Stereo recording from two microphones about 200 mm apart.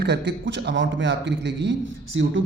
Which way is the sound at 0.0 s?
60° right (ahead or behind).